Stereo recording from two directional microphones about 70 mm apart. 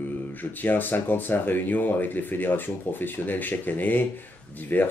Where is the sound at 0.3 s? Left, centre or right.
Left.